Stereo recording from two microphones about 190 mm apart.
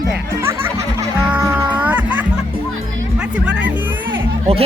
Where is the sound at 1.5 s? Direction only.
5° right (ahead or behind).